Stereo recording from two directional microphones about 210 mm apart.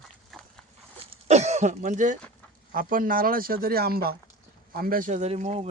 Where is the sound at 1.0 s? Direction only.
30° right (ahead or behind).